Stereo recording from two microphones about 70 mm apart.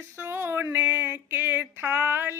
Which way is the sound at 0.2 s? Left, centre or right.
Right.